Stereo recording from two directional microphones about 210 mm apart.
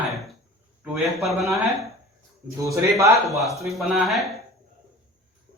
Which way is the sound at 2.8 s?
15° right (ahead or behind).